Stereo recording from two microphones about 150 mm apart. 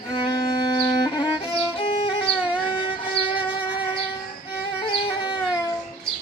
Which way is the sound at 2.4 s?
10° right (ahead or behind).